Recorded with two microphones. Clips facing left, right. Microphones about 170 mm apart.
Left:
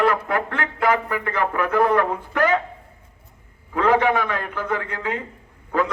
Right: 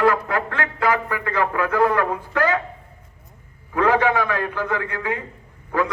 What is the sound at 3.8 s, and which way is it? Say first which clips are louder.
Speech: left 1 dB; 15° left (ahead or behind).